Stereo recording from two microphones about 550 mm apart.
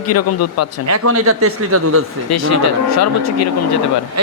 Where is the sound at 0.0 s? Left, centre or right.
Left.